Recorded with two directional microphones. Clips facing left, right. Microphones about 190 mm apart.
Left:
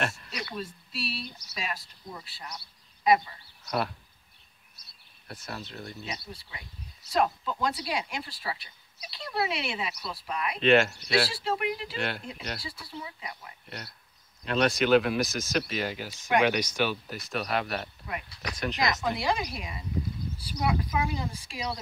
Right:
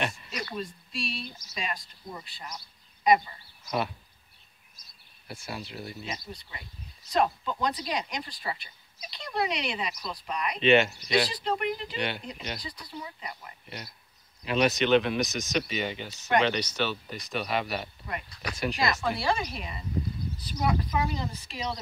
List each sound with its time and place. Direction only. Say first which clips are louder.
0.0 s speech: even; centre (ahead or behind)
5.3 s speech: right 1 dB; 10° right (ahead or behind)
7.6 s speech: even; 5° left (ahead or behind)
18.8 s speech: left 1 dB; 15° left (ahead or behind)